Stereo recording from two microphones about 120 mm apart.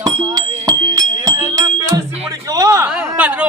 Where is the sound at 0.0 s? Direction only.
35° right (ahead or behind).